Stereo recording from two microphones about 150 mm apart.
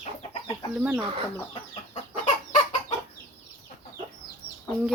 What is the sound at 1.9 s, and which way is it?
Chicken, 45° left (ahead or behind).